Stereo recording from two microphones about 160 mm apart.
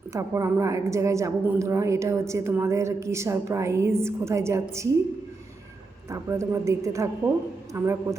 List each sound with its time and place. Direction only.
0.1 s a woman's voice: 20° right (ahead or behind)
6.1 s a woman's voice: 20° right (ahead or behind)